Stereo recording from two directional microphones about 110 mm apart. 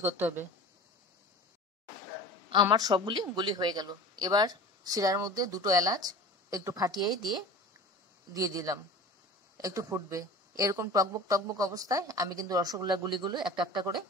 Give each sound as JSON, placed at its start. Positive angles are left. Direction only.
{"t": 0.0, "sound": "speech", "side_deg": -20}
{"t": 2.5, "sound": "a woman's voice", "side_deg": -40}
{"t": 8.3, "sound": "a woman's voice", "side_deg": -30}